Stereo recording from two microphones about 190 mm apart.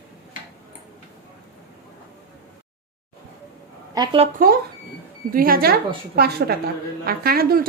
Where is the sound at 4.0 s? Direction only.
30° right (ahead or behind).